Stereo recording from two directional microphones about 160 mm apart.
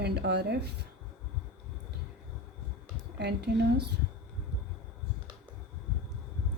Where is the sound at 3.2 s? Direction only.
90° right.